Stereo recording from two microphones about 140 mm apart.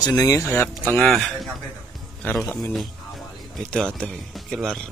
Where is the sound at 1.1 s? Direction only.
Centre (ahead or behind).